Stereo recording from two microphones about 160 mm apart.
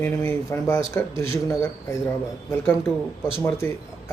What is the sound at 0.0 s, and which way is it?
Speech, 15° left (ahead or behind).